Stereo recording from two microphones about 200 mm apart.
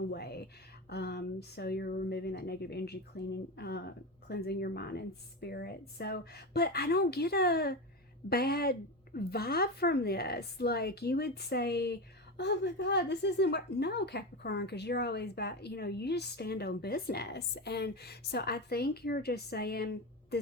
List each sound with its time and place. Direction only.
0.1 s a woman's voice: 55° left (ahead or behind)